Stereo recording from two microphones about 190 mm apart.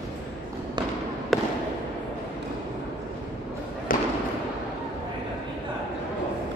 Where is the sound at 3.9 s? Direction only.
45° left (ahead or behind).